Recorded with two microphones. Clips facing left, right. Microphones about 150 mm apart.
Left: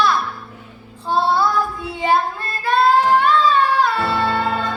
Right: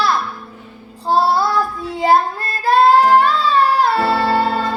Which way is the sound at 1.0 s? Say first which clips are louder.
Right 2 dB; 35° right (ahead or behind).